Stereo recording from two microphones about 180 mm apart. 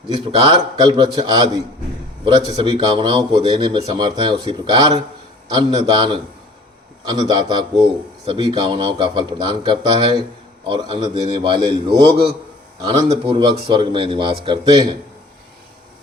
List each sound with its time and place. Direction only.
0.1 s speech: 25° right (ahead or behind)